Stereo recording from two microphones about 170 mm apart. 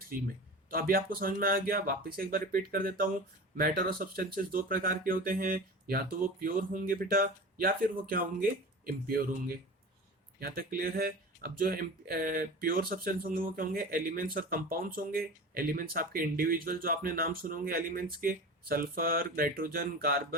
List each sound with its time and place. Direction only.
0.1 s speech: 55° right (ahead or behind)